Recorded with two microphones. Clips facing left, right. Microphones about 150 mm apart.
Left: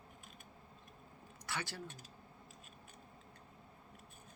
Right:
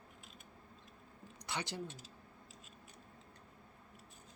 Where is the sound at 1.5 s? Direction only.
20° right (ahead or behind).